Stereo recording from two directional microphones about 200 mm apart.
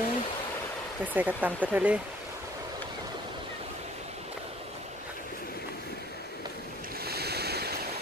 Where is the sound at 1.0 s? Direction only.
10° right (ahead or behind).